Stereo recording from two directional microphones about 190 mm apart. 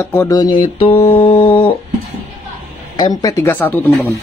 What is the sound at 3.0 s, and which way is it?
Speech, 20° left (ahead or behind).